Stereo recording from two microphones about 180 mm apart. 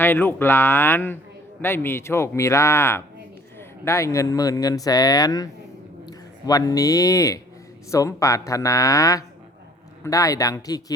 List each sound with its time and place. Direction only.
0.0 s a man's voice: 10° left (ahead or behind)